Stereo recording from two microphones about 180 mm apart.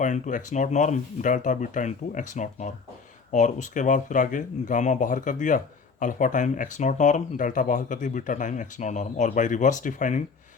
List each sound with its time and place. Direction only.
0.0 s speech: 45° left (ahead or behind)